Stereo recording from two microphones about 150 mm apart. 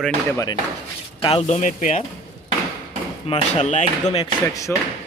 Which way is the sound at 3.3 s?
50° left (ahead or behind).